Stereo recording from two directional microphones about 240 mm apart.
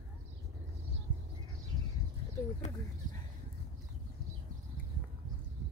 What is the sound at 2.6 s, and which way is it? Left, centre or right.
Speech, left.